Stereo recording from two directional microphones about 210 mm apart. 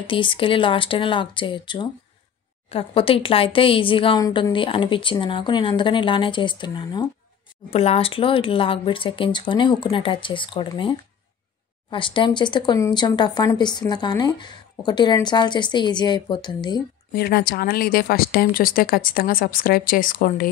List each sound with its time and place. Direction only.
0.0 s speech: 25° left (ahead or behind)
17.1 s speech: 50° left (ahead or behind)